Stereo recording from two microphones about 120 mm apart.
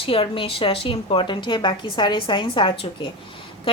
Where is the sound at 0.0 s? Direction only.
50° left (ahead or behind).